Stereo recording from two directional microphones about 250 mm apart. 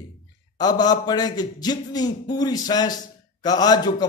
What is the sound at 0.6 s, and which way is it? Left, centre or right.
A man's voice, centre.